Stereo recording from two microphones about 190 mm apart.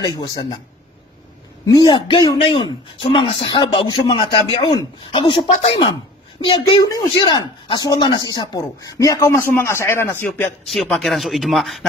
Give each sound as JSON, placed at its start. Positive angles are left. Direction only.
{"t": 0.0, "sound": "speech", "side_deg": 20}
{"t": 1.7, "sound": "speech", "side_deg": 25}
{"t": 10.7, "sound": "speech", "side_deg": 0}